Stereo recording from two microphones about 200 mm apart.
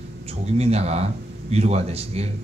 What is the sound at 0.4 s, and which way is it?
Speech, 30° right (ahead or behind).